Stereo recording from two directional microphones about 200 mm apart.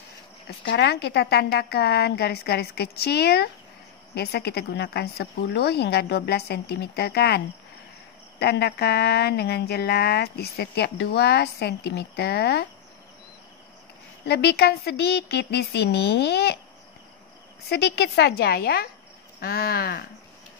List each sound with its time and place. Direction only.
0.7 s a woman's voice: 60° left (ahead or behind)
14.2 s a woman's voice: 55° left (ahead or behind)
17.6 s speech: 55° left (ahead or behind)